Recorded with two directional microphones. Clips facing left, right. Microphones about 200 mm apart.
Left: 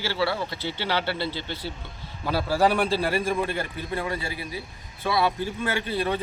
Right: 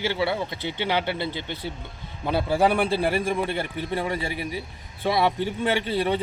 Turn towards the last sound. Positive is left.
turn(degrees=-20)  # may be behind; listen again after turning